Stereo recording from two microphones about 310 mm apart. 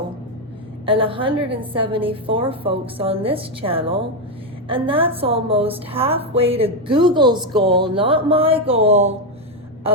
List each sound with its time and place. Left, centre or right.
0.9 s a woman's voice: centre